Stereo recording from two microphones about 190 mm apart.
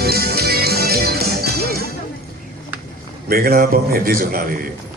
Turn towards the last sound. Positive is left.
turn(degrees=-50)  # may be behind; listen again after turning